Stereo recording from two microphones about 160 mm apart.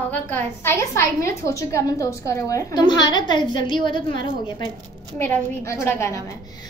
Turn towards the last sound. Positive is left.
turn(degrees=15)  # may be behind; listen again after turning